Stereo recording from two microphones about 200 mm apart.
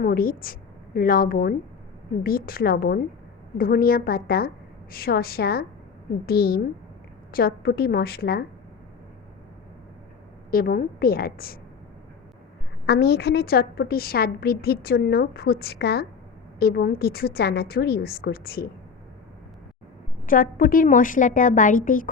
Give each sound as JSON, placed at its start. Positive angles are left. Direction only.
{"t": 0.0, "sound": "a woman's voice", "side_deg": 50}
{"t": 10.5, "sound": "a woman's voice", "side_deg": 45}
{"t": 12.8, "sound": "a woman's voice", "side_deg": 55}
{"t": 20.2, "sound": "a woman's voice", "side_deg": 45}